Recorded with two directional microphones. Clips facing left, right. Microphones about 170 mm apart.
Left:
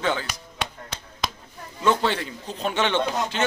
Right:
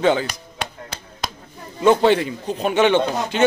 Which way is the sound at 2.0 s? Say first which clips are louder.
Right 9 dB; 15° right (ahead or behind).